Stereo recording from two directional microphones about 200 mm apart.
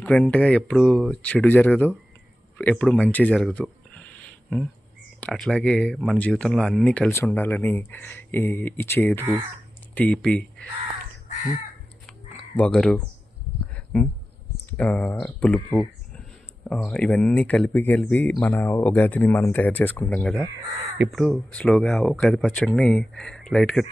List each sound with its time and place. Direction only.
0.0 s speech: 5° left (ahead or behind)
11.2 s crow: 40° left (ahead or behind)
12.5 s speech: 5° left (ahead or behind)